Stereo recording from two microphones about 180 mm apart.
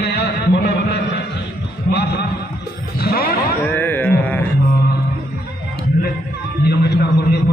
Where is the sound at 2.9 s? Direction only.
55° left (ahead or behind).